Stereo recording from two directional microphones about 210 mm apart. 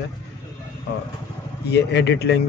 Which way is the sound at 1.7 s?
55° left (ahead or behind).